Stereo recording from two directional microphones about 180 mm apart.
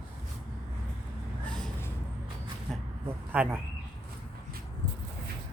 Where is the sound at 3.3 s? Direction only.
10° right (ahead or behind).